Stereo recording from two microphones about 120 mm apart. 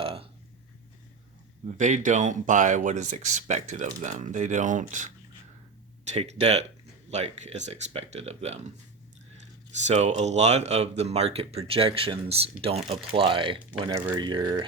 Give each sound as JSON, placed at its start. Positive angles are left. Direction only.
{"t": 0.0, "sound": "burping", "side_deg": -50}
{"t": 1.6, "sound": "speech", "side_deg": -90}
{"t": 6.1, "sound": "speech", "side_deg": -60}
{"t": 7.1, "sound": "speech", "side_deg": -70}
{"t": 9.7, "sound": "speech", "side_deg": -70}